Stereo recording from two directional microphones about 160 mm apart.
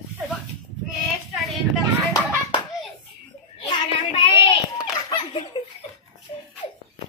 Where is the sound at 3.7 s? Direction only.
30° left (ahead or behind).